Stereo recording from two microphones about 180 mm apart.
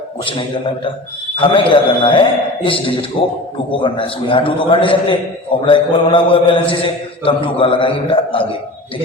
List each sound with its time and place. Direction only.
1.4 s mantra: 30° left (ahead or behind)
3.2 s a man's voice: 30° left (ahead or behind)
3.8 s mantra: 30° left (ahead or behind)